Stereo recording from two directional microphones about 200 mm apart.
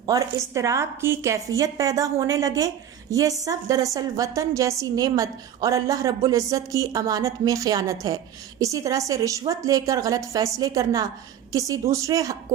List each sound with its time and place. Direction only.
0.0 s a woman's voice: 15° right (ahead or behind)